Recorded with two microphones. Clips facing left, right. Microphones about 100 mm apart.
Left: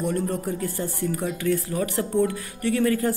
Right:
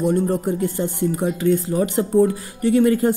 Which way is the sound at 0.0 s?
30° right (ahead or behind).